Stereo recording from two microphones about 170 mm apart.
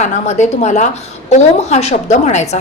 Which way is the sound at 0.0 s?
40° left (ahead or behind).